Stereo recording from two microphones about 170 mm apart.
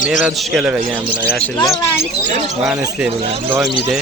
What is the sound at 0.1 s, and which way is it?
Speech, centre (ahead or behind).